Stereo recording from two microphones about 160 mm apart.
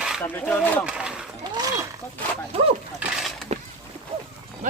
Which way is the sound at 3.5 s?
40° right (ahead or behind).